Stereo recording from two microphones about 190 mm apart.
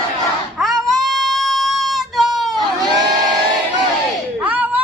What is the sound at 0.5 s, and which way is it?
Child singing, centre (ahead or behind).